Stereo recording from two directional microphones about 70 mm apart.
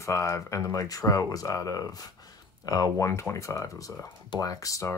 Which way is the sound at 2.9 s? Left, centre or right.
Left.